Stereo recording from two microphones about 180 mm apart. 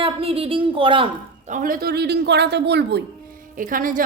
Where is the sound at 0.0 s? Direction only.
30° right (ahead or behind).